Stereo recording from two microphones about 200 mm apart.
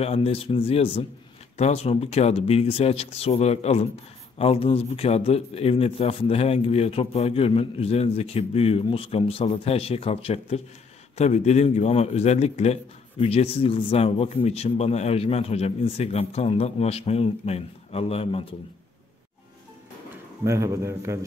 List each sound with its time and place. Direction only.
0.0 s a man's voice: 30° left (ahead or behind)
20.4 s a man's voice: 15° right (ahead or behind)